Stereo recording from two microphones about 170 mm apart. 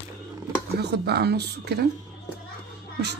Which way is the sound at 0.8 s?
75° right (ahead or behind).